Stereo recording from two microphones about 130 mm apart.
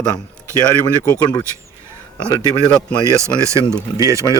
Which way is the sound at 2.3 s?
35° left (ahead or behind).